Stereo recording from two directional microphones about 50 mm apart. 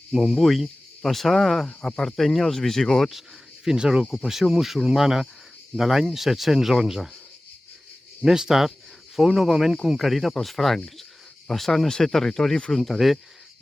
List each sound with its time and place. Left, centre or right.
0.1 s speech: centre
1.6 s speech: centre
3.1 s speech: centre
8.2 s speech: centre
12.7 s speech: centre